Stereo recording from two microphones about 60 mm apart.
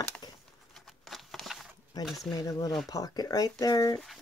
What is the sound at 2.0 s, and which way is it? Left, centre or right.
Speech, centre.